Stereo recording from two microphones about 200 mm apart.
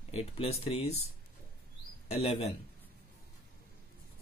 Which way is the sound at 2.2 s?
30° left (ahead or behind).